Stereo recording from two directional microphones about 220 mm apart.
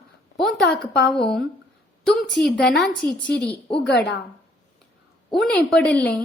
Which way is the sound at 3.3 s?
50° left (ahead or behind).